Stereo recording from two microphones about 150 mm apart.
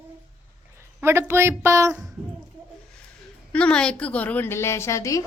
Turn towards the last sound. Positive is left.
turn(degrees=20)  # may be behind; listen again after turning